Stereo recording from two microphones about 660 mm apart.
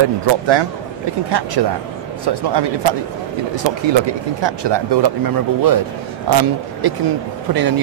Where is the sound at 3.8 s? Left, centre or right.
Right.